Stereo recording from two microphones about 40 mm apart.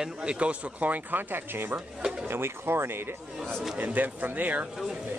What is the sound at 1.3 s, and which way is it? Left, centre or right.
Speech, right.